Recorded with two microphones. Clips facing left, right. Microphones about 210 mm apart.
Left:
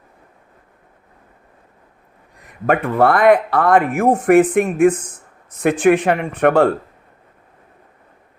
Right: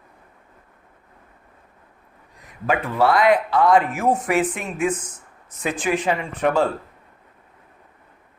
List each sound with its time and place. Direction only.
2.6 s speech: 55° left (ahead or behind)